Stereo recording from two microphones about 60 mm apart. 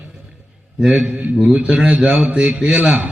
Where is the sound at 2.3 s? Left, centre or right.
Centre.